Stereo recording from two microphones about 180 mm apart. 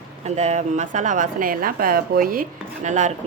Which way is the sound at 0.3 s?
40° right (ahead or behind).